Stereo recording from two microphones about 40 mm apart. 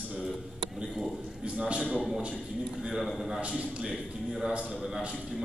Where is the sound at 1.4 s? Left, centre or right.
Right.